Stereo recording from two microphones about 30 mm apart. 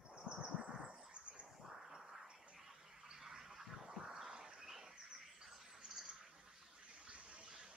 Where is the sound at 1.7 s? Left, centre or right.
Centre.